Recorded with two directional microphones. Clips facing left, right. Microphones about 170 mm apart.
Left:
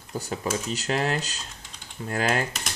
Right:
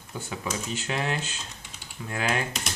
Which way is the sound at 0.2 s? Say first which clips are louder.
Left 3 dB; 40° left (ahead or behind).